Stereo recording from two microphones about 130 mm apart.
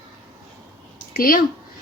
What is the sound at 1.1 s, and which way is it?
Speech, 90° left.